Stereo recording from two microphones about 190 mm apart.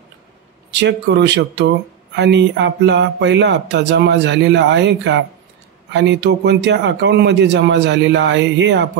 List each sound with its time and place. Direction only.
0.7 s a man's voice: 65° right (ahead or behind)